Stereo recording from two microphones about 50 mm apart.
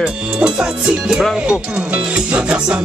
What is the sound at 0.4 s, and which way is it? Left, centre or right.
Music, centre.